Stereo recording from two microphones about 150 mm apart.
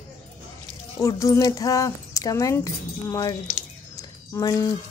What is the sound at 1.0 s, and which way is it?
A woman's voice, 20° left (ahead or behind).